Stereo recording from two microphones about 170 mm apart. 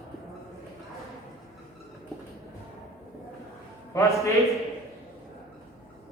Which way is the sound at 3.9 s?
20° left (ahead or behind).